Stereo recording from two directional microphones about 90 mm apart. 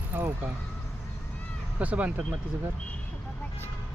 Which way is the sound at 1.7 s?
15° right (ahead or behind).